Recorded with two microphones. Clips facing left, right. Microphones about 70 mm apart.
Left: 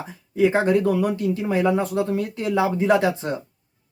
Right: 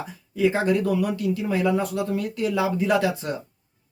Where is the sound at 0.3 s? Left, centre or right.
Left.